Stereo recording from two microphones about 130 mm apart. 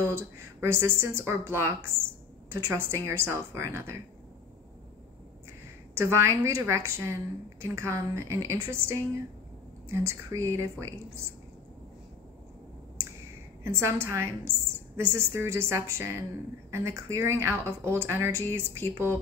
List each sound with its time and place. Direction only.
0.0 s speech: 20° right (ahead or behind)
5.9 s speech: 20° right (ahead or behind)
13.7 s speech: 20° right (ahead or behind)